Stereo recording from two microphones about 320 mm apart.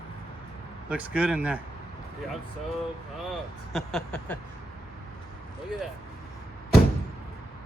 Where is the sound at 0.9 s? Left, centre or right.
Centre.